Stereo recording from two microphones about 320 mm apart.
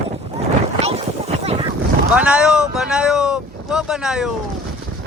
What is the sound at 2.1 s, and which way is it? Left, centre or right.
Speech, centre.